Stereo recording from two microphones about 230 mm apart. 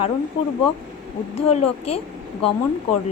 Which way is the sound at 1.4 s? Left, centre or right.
Left.